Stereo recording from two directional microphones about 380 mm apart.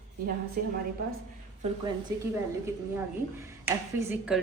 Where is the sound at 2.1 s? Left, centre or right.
Centre.